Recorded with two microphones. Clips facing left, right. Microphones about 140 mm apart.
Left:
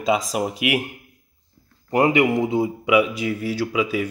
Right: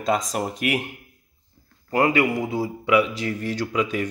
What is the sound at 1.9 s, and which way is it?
Speech, 20° left (ahead or behind).